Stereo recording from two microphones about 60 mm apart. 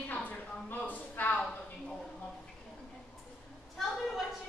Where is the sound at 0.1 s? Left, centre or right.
Left.